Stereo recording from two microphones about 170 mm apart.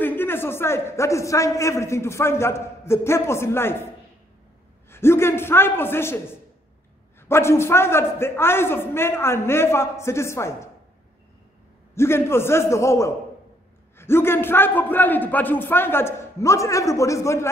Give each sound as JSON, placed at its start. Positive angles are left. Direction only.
{"t": 0.0, "sound": "a man's voice", "side_deg": 10}
{"t": 4.8, "sound": "a man's voice", "side_deg": 15}
{"t": 7.2, "sound": "a man's voice", "side_deg": 15}
{"t": 11.9, "sound": "a man's voice", "side_deg": 15}